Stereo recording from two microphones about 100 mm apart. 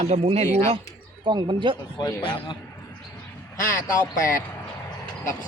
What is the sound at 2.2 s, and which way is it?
Speech, 60° left (ahead or behind).